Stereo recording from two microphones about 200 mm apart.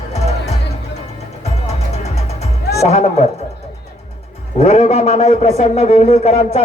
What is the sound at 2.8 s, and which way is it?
Speech, 35° left (ahead or behind).